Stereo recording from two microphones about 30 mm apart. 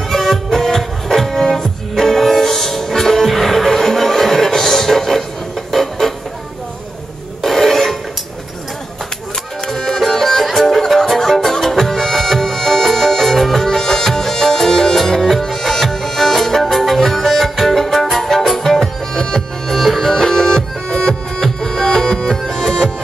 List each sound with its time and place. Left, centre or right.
0.1 s music: centre
5.7 s a sound: centre
7.4 s music: centre
9.9 s music: centre